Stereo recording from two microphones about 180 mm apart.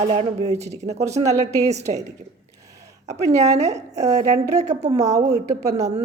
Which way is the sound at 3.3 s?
40° right (ahead or behind).